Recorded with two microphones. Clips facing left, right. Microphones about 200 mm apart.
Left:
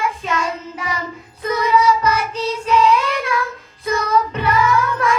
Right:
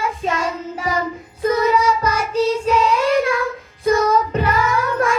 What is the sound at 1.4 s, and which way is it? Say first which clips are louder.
Child singing: even; 40° right (ahead or behind).